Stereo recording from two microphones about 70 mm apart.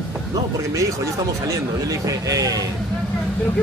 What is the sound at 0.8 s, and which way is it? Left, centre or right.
Speech, right.